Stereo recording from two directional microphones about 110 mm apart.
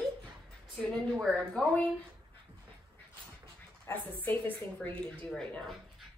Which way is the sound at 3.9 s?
15° left (ahead or behind).